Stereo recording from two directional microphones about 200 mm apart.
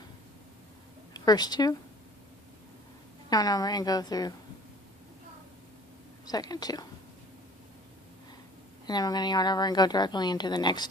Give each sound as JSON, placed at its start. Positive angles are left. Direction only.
{"t": 1.1, "sound": "a woman's voice", "side_deg": 20}
{"t": 3.2, "sound": "a woman's voice", "side_deg": 20}
{"t": 6.2, "sound": "a woman's voice", "side_deg": 20}
{"t": 8.9, "sound": "a woman's voice", "side_deg": 20}